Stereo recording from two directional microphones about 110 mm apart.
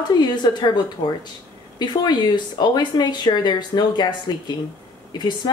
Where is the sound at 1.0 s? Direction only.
80° left.